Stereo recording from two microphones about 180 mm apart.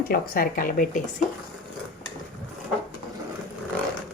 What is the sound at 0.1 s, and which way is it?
Speech, 50° left (ahead or behind).